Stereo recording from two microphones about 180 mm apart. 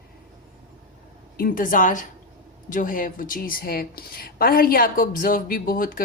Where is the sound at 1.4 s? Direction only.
50° left (ahead or behind).